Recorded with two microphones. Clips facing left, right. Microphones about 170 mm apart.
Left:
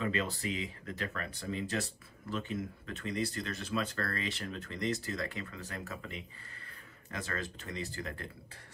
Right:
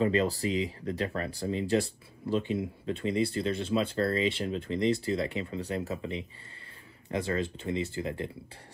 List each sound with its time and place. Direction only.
0.0 s speech: 35° right (ahead or behind)